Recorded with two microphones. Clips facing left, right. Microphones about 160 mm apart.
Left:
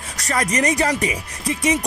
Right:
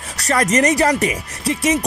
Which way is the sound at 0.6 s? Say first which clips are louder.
Right 4 dB; 35° right (ahead or behind).